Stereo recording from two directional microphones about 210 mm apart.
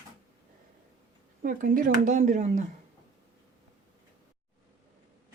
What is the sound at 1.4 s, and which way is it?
Speech, 40° right (ahead or behind).